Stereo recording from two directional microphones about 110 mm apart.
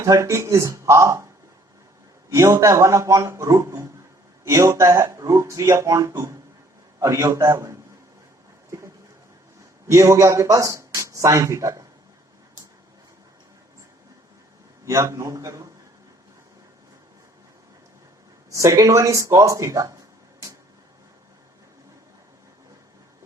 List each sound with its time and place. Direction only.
0.0 s speech: 30° right (ahead or behind)
2.3 s speech: 30° right (ahead or behind)
9.8 s speech: 25° right (ahead or behind)
14.8 s speech: 25° right (ahead or behind)
18.5 s speech: 30° right (ahead or behind)